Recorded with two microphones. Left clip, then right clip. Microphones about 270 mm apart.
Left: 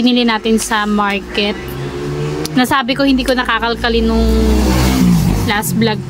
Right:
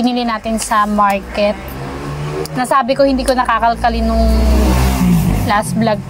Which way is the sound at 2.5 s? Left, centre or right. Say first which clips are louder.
Right 1 dB; left.